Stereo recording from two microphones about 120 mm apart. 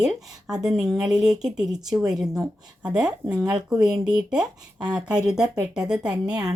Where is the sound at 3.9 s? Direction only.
5° right (ahead or behind).